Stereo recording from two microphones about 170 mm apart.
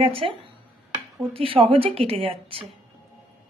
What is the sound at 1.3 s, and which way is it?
Speech, 30° right (ahead or behind).